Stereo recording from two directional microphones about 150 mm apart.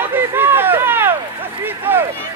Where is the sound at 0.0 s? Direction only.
15° right (ahead or behind).